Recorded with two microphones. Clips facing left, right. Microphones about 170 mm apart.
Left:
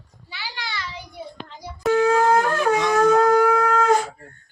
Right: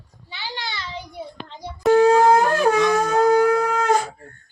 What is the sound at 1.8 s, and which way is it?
Shofar, 35° right (ahead or behind).